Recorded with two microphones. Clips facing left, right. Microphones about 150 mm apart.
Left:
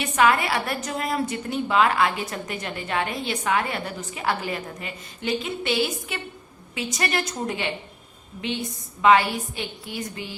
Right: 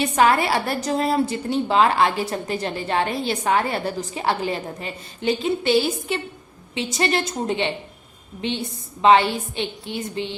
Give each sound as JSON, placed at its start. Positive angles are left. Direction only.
{"t": 0.0, "sound": "a woman's voice", "side_deg": -30}